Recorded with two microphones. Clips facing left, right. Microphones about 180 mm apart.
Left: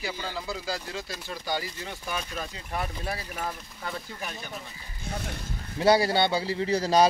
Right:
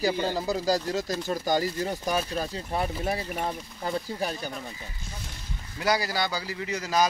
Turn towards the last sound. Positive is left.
turn(degrees=30)  # may be behind; listen again after turning